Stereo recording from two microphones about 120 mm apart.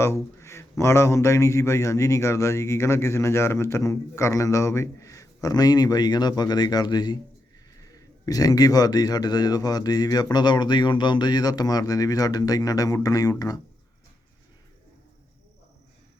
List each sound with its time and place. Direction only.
0.0 s a man's voice: 20° left (ahead or behind)